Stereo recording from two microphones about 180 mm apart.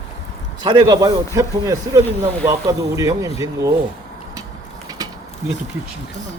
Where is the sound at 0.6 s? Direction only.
20° right (ahead or behind).